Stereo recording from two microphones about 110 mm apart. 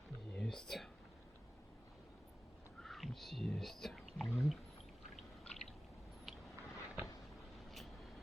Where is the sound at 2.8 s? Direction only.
Centre (ahead or behind).